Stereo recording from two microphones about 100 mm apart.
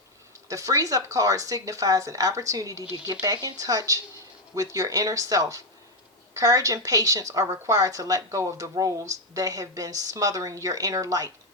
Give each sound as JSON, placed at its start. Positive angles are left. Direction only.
{"t": 0.4, "sound": "speech", "side_deg": -35}